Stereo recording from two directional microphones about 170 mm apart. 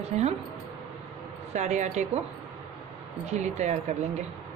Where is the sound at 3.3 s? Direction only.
45° right (ahead or behind).